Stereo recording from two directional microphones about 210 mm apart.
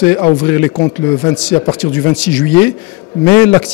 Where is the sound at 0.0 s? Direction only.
10° left (ahead or behind).